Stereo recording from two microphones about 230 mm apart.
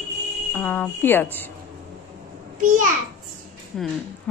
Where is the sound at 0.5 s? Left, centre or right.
Centre.